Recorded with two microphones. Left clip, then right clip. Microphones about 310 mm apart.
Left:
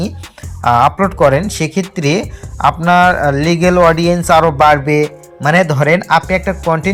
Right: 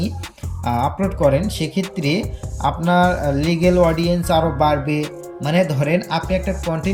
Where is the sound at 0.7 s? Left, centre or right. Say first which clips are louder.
Left 11 dB; left.